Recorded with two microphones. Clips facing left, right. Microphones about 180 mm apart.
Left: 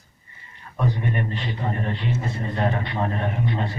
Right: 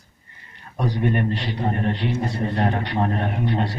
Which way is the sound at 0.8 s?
70° right (ahead or behind).